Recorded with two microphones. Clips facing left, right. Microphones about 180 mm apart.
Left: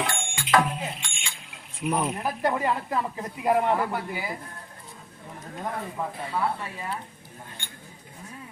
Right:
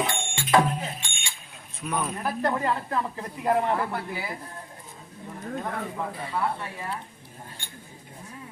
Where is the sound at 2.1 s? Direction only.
15° left (ahead or behind).